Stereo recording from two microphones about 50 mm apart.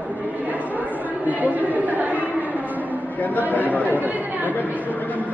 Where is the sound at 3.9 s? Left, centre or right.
Right.